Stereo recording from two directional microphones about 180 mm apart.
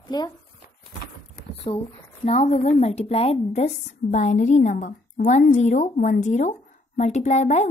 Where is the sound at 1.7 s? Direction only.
30° left (ahead or behind).